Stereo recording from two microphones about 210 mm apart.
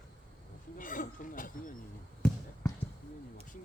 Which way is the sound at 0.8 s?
40° left (ahead or behind).